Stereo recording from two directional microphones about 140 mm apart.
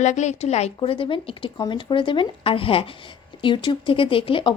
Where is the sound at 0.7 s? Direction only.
40° left (ahead or behind).